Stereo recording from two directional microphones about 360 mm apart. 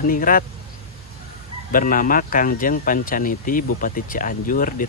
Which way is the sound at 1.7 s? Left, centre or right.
Left.